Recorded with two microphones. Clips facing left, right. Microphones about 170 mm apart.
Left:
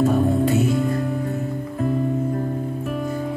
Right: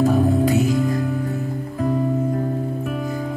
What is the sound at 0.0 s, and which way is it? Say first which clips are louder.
Music: right 1 dB; 35° right (ahead or behind).